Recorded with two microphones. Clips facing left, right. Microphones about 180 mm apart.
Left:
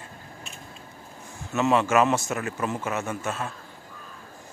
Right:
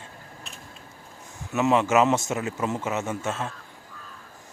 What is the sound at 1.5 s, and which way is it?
A man's voice, 15° right (ahead or behind).